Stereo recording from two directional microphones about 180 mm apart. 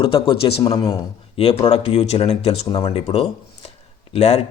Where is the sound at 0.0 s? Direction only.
30° left (ahead or behind).